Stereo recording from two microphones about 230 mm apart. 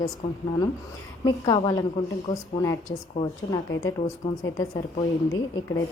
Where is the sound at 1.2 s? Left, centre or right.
Centre.